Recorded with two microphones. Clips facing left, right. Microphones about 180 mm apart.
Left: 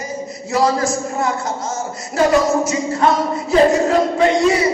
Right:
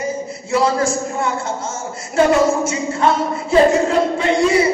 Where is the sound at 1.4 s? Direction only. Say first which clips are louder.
Left 1 dB; 30° right (ahead or behind).